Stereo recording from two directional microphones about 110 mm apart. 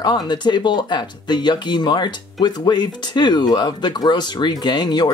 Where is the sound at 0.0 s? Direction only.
40° left (ahead or behind).